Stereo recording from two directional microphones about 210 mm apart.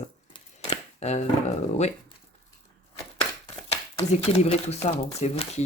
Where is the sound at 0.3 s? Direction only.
30° left (ahead or behind).